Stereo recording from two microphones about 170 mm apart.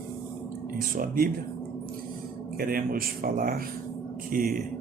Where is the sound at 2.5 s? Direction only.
55° right (ahead or behind).